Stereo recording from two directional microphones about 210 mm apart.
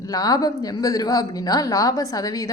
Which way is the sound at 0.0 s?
15° left (ahead or behind).